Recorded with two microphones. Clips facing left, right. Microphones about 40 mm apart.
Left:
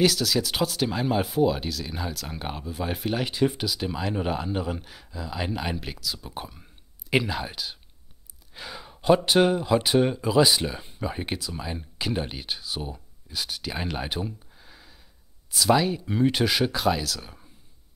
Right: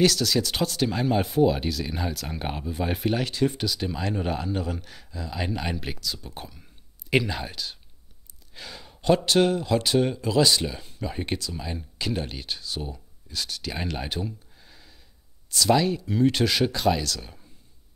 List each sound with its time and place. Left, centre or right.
0.0 s speech: centre
3.3 s speech: centre
16.0 s speech: left
16.3 s speech: centre